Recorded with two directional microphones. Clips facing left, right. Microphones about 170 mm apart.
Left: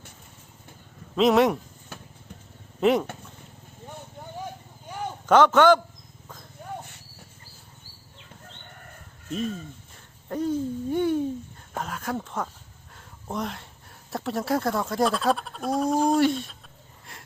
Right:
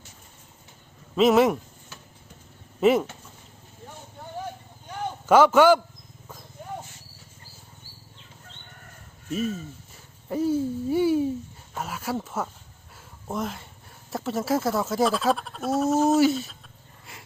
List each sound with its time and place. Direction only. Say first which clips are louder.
1.1 s speech: right 1 dB; centre (ahead or behind)
1.9 s vehicle: left 5 dB; 55° left (ahead or behind)
2.8 s speech: right 1 dB; centre (ahead or behind)
5.2 s a man's voice: right 1 dB; 10° right (ahead or behind)
6.8 s cricket: left 1 dB; 60° left (ahead or behind)
9.3 s speech: right 2 dB; 5° right (ahead or behind)
10.2 s hoot: right 2 dB; 5° right (ahead or behind)
11.8 s speech: right 1 dB; 5° right (ahead or behind)
17.1 s a sound: right 1 dB; centre (ahead or behind)